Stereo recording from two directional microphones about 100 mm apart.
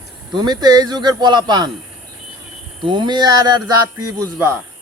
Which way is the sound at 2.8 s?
50° right (ahead or behind).